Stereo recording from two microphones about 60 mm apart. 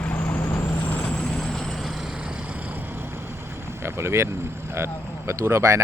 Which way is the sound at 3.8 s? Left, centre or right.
Right.